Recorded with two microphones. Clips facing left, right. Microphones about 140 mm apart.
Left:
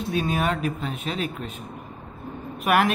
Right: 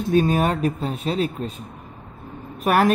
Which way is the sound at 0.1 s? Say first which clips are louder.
Right 6 dB; 45° right (ahead or behind).